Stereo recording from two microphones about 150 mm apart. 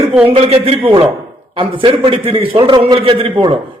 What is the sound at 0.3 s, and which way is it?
A man's voice, 40° right (ahead or behind).